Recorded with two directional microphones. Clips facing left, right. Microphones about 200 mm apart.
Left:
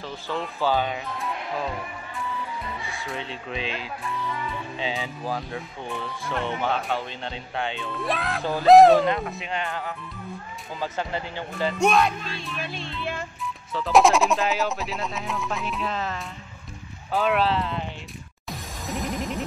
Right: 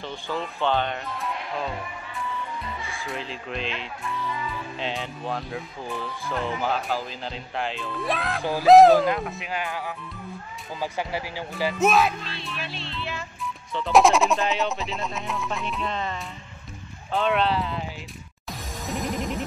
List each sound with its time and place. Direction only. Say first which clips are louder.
0.0 s speech: even; centre (ahead or behind)
3.0 s speech: right 1 dB; centre (ahead or behind)
12.4 s music: left 2 dB; 45° left (ahead or behind)
13.7 s speech: even; centre (ahead or behind)
18.5 s music: right 1 dB; centre (ahead or behind)